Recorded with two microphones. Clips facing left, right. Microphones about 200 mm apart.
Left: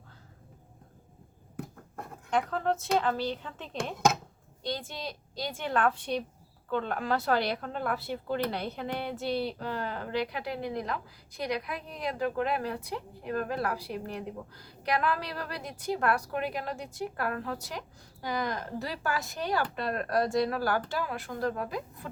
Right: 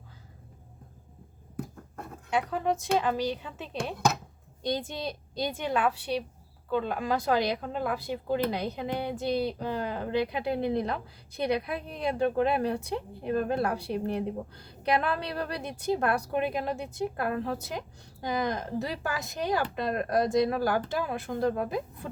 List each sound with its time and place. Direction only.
2.3 s a woman's voice: 10° right (ahead or behind)